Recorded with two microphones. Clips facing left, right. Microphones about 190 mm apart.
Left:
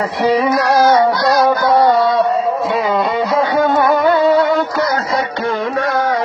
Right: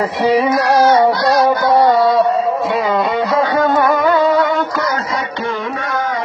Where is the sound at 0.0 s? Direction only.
25° right (ahead or behind).